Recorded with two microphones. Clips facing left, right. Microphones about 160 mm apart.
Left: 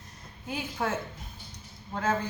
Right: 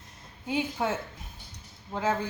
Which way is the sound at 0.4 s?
20° right (ahead or behind).